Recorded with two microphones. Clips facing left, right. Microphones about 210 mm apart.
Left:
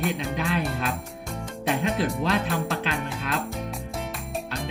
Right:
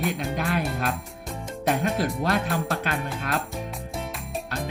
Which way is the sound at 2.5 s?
Centre (ahead or behind).